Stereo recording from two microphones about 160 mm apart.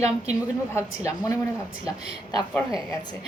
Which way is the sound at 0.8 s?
20° left (ahead or behind).